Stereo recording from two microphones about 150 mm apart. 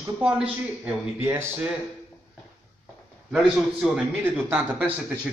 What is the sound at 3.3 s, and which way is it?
Speech, 5° right (ahead or behind).